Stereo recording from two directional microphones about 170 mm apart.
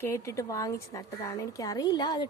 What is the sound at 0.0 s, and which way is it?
A woman's voice, 15° left (ahead or behind).